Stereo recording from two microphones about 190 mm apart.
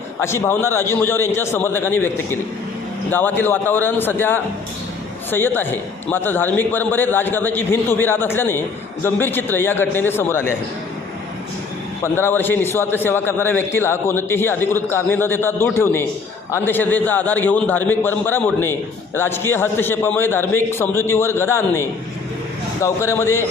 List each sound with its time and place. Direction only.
0.2 s a man's voice: 15° left (ahead or behind)
12.0 s a man's voice: 10° left (ahead or behind)